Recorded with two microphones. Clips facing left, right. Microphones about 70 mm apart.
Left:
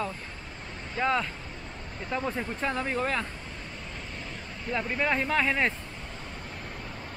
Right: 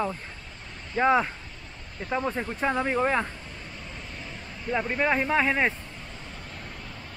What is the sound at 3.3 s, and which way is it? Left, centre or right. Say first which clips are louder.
Vehicle: left 1 dB; centre.